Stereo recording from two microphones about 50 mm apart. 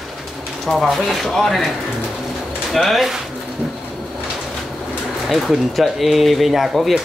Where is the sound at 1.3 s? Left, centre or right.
Centre.